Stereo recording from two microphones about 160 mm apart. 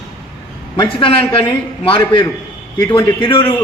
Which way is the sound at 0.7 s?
30° left (ahead or behind).